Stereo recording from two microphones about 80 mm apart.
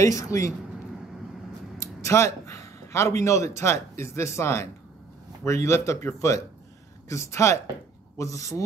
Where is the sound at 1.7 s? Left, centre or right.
Left.